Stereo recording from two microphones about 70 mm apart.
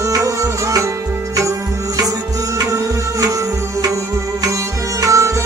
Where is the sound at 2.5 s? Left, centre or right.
Right.